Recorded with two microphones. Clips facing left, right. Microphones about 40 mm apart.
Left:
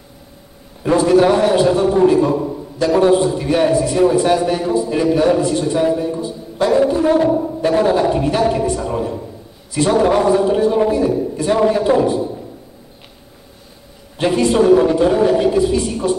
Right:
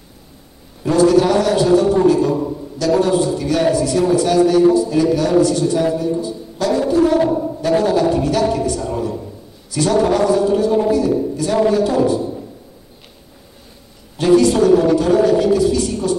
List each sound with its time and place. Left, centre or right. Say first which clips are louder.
0.8 s a man's voice: left 1 dB; left
14.1 s a man's voice: right 2 dB; left